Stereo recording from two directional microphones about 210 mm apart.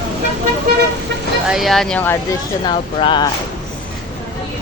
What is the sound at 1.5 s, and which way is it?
Speech, centre (ahead or behind).